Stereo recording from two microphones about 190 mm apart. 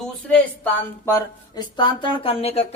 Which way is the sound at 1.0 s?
20° left (ahead or behind).